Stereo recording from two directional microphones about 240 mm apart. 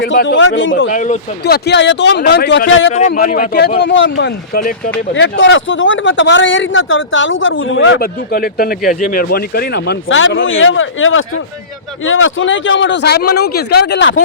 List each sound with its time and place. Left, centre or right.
0.1 s speech: left
0.9 s speech: left
2.9 s speech: left